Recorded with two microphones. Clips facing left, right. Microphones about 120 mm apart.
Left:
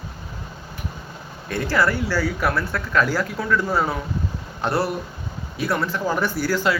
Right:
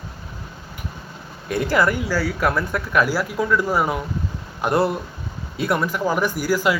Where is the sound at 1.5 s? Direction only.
20° right (ahead or behind).